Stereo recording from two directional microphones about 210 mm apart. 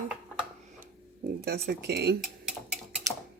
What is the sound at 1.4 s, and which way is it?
Speech, 50° right (ahead or behind).